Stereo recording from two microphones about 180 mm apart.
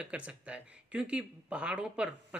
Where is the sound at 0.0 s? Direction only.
5° right (ahead or behind).